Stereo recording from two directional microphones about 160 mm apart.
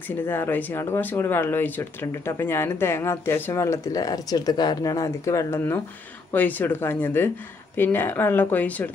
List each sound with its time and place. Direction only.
0.3 s speech: 10° left (ahead or behind)